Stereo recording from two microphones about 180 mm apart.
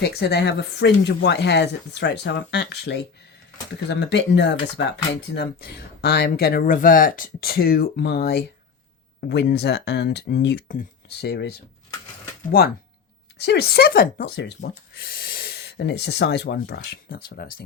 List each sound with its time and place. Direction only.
0.0 s speech: 65° left (ahead or behind)
10.7 s speech: 50° left (ahead or behind)
11.3 s speech: 70° left (ahead or behind)
12.5 s speech: 55° left (ahead or behind)